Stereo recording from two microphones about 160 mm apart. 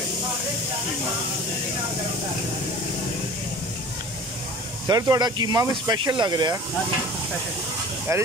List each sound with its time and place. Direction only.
4.8 s speech: 25° right (ahead or behind)
8.1 s speech: 20° right (ahead or behind)